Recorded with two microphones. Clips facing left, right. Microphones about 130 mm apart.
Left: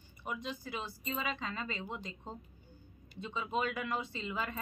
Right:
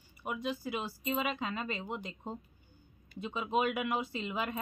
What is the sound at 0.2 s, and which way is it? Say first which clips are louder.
A woman's voice: right 4 dB; 10° right (ahead or behind).